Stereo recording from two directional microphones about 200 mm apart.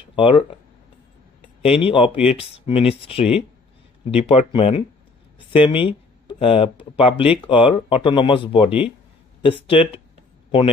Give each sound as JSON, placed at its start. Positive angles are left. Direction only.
{"t": 0.1, "sound": "speech", "side_deg": 25}
{"t": 1.8, "sound": "speech", "side_deg": 25}